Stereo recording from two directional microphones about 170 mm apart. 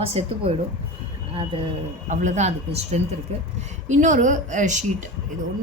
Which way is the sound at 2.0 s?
45° right (ahead or behind).